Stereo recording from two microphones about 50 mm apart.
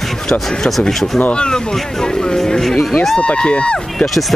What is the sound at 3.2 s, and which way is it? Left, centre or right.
Speech, left.